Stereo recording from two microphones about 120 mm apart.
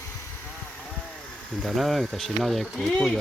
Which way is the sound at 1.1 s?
Centre (ahead or behind).